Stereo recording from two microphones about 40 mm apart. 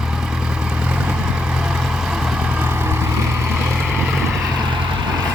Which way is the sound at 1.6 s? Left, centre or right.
Centre.